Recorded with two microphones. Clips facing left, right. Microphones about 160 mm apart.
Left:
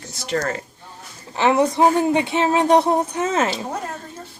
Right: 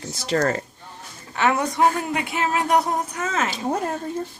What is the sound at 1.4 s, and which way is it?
Speech, 25° left (ahead or behind).